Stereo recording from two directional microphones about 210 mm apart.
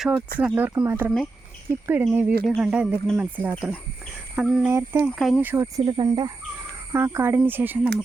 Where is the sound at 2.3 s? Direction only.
45° right (ahead or behind).